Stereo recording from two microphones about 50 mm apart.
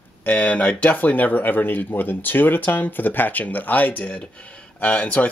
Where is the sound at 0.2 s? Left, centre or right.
Left.